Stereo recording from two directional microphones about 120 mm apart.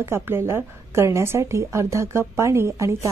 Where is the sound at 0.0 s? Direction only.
20° right (ahead or behind).